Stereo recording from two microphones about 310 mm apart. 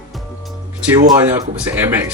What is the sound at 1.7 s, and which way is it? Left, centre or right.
Speech, centre.